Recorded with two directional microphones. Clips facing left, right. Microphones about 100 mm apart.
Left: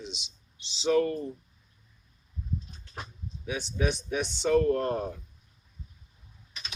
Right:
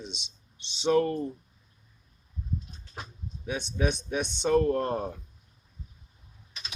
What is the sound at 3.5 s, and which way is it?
Speech, 20° right (ahead or behind).